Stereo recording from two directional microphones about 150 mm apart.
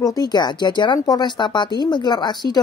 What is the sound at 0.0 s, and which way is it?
Speech, 25° left (ahead or behind).